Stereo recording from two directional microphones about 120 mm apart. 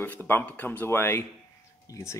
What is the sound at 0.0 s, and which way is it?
Speech, 15° left (ahead or behind).